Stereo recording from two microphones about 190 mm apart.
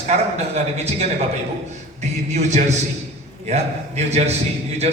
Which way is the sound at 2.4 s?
35° right (ahead or behind).